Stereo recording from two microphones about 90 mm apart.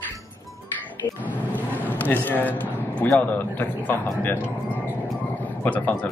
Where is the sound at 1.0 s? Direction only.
20° left (ahead or behind).